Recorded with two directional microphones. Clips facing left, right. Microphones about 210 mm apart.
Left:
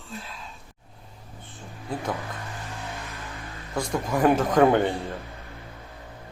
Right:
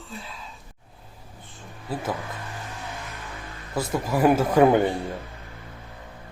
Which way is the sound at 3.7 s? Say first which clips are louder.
Right 1 dB; 5° right (ahead or behind).